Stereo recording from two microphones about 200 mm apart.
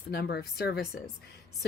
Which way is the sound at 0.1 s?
50° left (ahead or behind).